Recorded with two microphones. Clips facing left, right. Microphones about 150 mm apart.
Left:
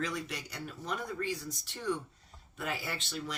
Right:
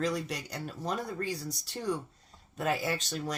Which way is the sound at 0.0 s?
35° right (ahead or behind).